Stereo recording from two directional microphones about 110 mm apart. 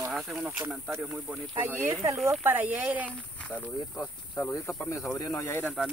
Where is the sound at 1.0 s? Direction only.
15° right (ahead or behind).